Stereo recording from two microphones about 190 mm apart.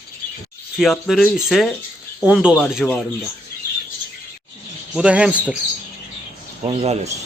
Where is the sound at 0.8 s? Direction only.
Centre (ahead or behind).